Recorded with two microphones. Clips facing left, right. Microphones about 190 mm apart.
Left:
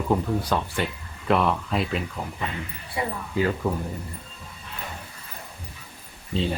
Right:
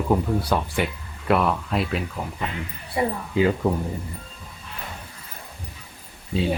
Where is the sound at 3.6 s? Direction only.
20° right (ahead or behind).